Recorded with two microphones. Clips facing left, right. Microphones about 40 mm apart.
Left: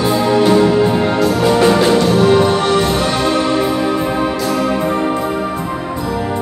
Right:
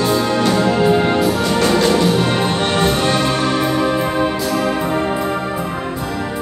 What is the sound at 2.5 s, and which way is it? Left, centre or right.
Music, right.